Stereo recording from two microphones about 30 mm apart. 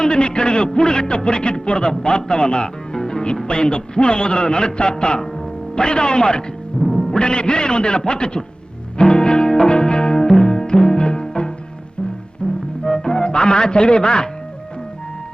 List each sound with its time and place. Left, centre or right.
0.0 s speech: left
6.8 s music: left
7.2 s speech: left
9.0 s music: left